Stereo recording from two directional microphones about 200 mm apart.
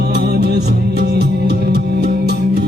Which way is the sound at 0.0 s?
55° right (ahead or behind).